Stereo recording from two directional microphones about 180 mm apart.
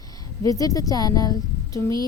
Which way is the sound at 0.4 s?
20° left (ahead or behind).